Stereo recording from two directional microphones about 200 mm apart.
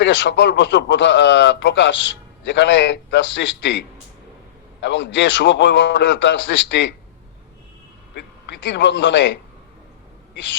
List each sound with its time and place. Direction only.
0.0 s a man's voice: 65° left (ahead or behind)
4.8 s a man's voice: 65° left (ahead or behind)
8.6 s a man's voice: 60° left (ahead or behind)